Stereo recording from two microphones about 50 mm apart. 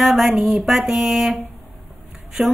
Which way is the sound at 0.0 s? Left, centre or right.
Centre.